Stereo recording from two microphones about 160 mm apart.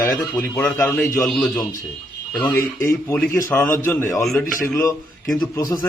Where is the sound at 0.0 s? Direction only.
15° left (ahead or behind).